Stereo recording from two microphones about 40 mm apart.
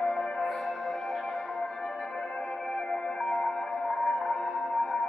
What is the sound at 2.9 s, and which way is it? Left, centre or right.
Music, left.